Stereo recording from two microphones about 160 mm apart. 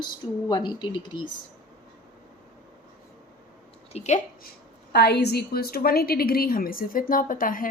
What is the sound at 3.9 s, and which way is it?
Speech, 45° left (ahead or behind).